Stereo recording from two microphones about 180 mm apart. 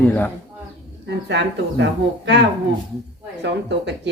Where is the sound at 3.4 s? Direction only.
75° right (ahead or behind).